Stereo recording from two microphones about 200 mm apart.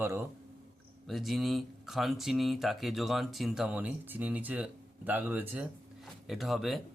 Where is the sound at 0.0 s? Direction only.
15° right (ahead or behind).